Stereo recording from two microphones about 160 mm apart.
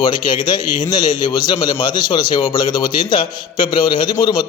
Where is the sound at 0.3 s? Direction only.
25° left (ahead or behind).